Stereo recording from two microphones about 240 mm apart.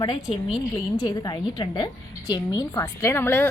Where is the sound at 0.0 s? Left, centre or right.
Centre.